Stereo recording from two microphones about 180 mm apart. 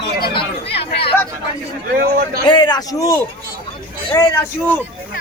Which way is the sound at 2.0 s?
55° right (ahead or behind).